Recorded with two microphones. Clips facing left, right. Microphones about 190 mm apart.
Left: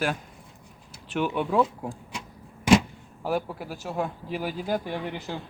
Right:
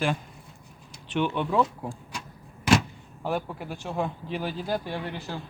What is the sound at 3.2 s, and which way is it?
Speech, 5° left (ahead or behind).